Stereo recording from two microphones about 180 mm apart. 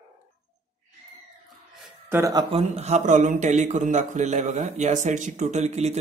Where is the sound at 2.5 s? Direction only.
35° right (ahead or behind).